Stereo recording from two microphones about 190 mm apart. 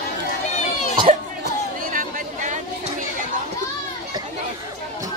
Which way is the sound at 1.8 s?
45° right (ahead or behind).